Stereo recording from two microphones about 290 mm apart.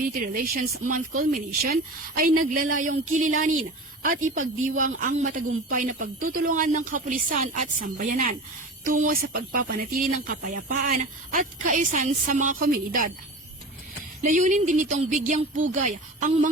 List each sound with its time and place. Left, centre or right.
0.0 s speech: right
14.2 s speech: right